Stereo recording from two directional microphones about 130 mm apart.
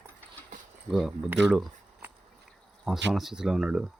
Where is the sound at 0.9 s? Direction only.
Centre (ahead or behind).